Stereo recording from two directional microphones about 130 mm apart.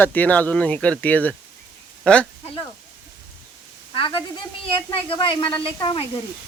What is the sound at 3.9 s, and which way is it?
Speech, 45° left (ahead or behind).